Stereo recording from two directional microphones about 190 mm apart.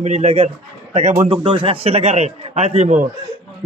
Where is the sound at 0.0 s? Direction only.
35° right (ahead or behind).